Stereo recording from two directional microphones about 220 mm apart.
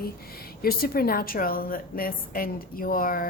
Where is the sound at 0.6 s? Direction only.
45° left (ahead or behind).